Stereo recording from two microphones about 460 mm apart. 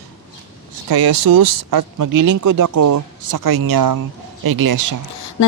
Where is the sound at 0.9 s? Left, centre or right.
Right.